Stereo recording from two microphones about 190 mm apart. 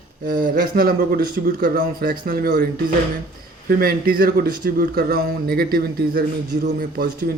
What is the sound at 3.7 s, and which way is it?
Speech, 50° right (ahead or behind).